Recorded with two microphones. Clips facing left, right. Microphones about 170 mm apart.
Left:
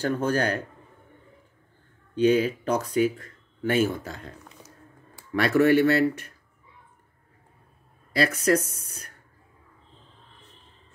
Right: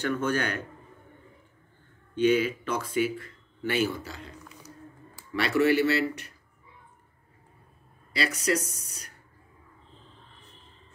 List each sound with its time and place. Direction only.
0.0 s a man's voice: 35° left (ahead or behind)
2.1 s speech: 35° left (ahead or behind)
8.1 s speech: 55° left (ahead or behind)